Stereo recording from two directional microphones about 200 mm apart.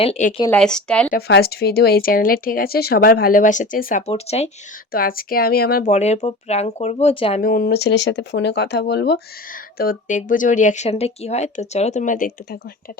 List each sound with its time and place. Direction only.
0.0 s speech: 30° left (ahead or behind)
0.5 s speech: 5° left (ahead or behind)
1.1 s speech: 50° left (ahead or behind); by 4.4 s 30° left (ahead or behind)
4.9 s speech: 45° left (ahead or behind)
5.9 s speech: 35° left (ahead or behind)
7.4 s speech: 45° left (ahead or behind)